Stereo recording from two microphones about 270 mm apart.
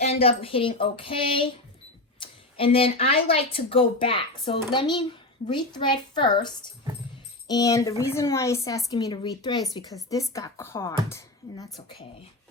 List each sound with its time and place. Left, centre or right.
0.0 s speech: left